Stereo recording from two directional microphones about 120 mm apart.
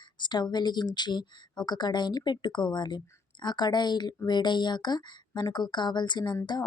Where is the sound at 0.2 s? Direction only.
40° left (ahead or behind).